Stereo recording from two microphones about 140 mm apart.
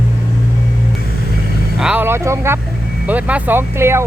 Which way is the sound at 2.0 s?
20° right (ahead or behind).